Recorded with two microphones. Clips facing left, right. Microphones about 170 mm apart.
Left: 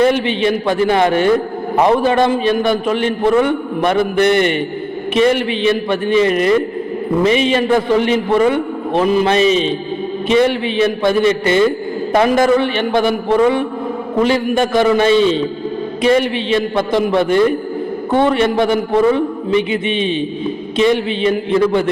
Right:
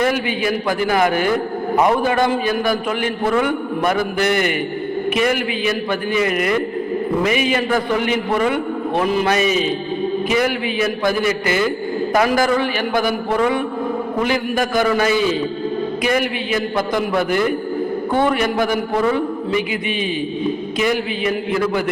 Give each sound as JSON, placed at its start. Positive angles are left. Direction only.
{"t": 0.0, "sound": "a man's voice", "side_deg": 25}